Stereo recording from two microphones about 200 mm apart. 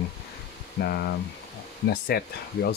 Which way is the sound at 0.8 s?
50° left (ahead or behind).